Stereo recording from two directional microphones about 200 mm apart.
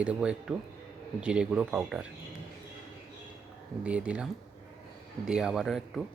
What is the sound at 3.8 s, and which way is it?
Speech, 5° right (ahead or behind).